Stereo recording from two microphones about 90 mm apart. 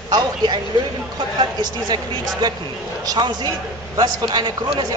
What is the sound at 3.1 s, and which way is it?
A man's voice, 55° right (ahead or behind).